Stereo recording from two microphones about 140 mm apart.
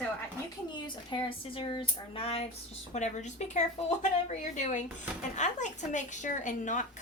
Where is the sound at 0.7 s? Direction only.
35° left (ahead or behind).